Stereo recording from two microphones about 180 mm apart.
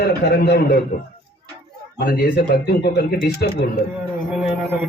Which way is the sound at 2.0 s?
60° left (ahead or behind).